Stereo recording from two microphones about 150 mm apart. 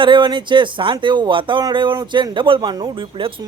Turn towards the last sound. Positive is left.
turn(degrees=-30)  # may be behind; listen again after turning